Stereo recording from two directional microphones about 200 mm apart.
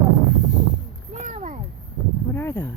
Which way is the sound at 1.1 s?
35° right (ahead or behind).